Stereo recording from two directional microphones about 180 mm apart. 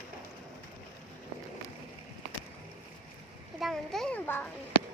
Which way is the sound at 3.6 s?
Centre (ahead or behind).